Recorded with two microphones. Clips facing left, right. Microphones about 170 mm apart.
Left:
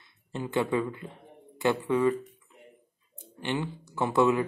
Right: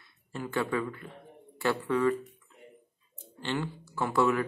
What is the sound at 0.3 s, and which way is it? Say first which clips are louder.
Speech: left 3 dB; 20° left (ahead or behind).